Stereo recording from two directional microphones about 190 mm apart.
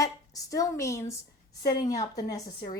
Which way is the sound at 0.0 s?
20° left (ahead or behind).